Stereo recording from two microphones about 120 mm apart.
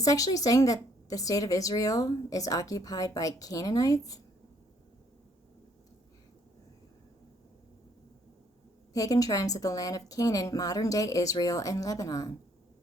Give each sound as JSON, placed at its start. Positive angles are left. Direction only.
{"t": 0.0, "sound": "a woman's voice", "side_deg": 30}
{"t": 8.9, "sound": "a woman's voice", "side_deg": 30}